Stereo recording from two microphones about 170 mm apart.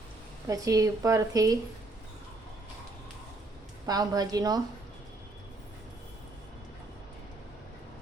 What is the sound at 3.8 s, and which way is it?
Speech, 20° right (ahead or behind).